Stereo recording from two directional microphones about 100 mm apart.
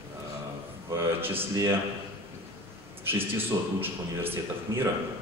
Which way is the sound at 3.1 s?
20° right (ahead or behind).